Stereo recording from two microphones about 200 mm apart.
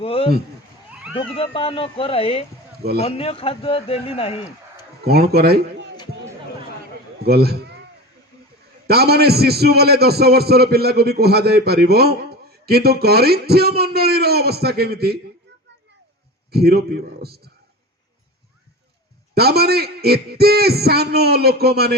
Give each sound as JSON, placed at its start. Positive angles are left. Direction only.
{"t": 0.0, "sound": "a man's voice", "side_deg": 30}
{"t": 2.7, "sound": "speech", "side_deg": -50}
{"t": 3.0, "sound": "a man's voice", "side_deg": 30}
{"t": 5.0, "sound": "a man's voice", "side_deg": -50}
{"t": 7.2, "sound": "a man's voice", "side_deg": -50}
{"t": 8.9, "sound": "a man's voice", "side_deg": -50}
{"t": 16.5, "sound": "a man's voice", "side_deg": -50}
{"t": 19.3, "sound": "a man's voice", "side_deg": -50}